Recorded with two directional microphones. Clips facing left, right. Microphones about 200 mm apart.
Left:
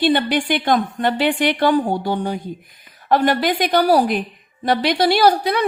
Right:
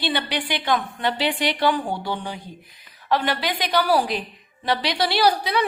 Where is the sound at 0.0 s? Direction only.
50° left (ahead or behind).